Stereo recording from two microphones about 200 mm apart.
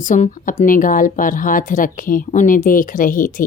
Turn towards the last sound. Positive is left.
turn(degrees=45)  # may be behind; listen again after turning